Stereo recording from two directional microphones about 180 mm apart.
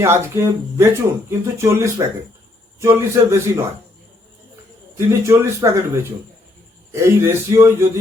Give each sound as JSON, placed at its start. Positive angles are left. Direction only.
{"t": 0.0, "sound": "speech", "side_deg": -15}
{"t": 4.9, "sound": "speech", "side_deg": -15}